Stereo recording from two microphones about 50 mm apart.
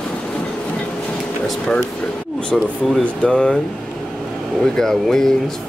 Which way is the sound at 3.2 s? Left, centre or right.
Left.